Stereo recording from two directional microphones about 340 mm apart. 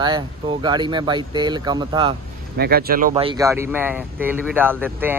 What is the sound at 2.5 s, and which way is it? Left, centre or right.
Speech, right.